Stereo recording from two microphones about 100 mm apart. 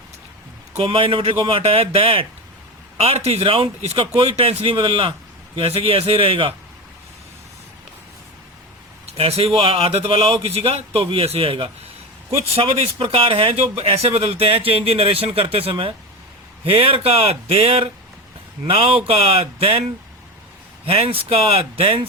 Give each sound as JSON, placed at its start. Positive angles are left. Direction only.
{"t": 0.8, "sound": "a man's voice", "side_deg": -65}
{"t": 3.0, "sound": "speech", "side_deg": -85}
{"t": 5.5, "sound": "speech", "side_deg": -70}
{"t": 9.0, "sound": "speech", "side_deg": -80}
{"t": 12.5, "sound": "speech", "side_deg": -75}
{"t": 20.8, "sound": "speech", "side_deg": -75}